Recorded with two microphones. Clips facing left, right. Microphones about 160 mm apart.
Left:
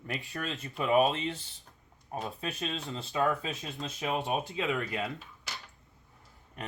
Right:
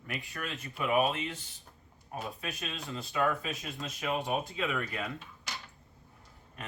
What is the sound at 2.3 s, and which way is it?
Speech, 30° left (ahead or behind).